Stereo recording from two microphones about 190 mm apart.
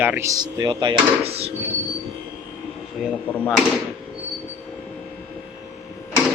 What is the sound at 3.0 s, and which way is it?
Speech, 5° right (ahead or behind).